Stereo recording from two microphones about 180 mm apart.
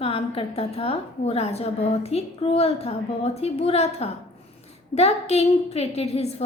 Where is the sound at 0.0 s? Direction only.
30° left (ahead or behind).